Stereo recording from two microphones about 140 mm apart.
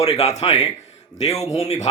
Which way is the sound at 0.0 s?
50° left (ahead or behind).